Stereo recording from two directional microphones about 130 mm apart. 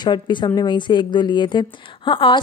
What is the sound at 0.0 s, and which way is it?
A woman's voice, 35° left (ahead or behind).